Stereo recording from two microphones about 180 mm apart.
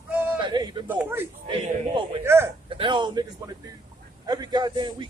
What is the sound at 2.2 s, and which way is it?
Speech, 15° right (ahead or behind).